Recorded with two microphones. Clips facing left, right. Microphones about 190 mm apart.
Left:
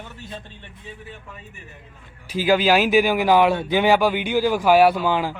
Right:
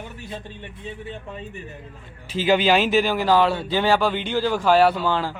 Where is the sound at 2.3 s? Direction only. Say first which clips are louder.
Left 1 dB; 5° left (ahead or behind).